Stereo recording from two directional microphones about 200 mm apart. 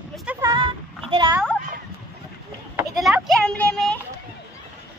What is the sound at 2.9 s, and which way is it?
Speech, centre (ahead or behind).